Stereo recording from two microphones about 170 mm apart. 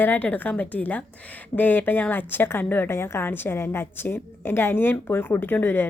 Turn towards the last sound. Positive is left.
turn(degrees=10)  # may be behind; listen again after turning